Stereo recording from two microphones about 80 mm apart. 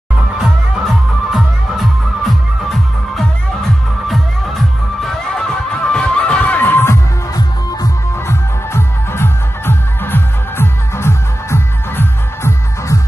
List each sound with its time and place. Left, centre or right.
0.4 s music: centre
5.9 s music: centre
8.3 s music: left